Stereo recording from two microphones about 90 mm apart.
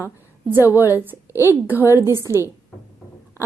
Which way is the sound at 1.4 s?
25° right (ahead or behind).